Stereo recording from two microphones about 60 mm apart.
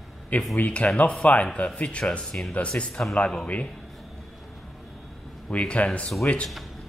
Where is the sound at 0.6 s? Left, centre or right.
Centre.